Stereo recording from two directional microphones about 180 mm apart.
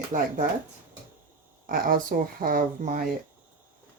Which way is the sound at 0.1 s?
45° right (ahead or behind).